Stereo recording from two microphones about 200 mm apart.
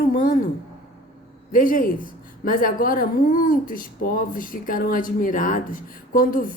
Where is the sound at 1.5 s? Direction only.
45° left (ahead or behind).